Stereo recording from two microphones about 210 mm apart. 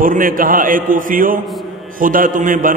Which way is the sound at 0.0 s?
40° right (ahead or behind).